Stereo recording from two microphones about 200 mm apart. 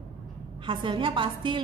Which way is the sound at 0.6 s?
25° right (ahead or behind).